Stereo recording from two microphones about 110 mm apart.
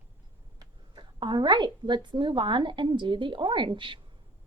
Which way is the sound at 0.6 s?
45° right (ahead or behind).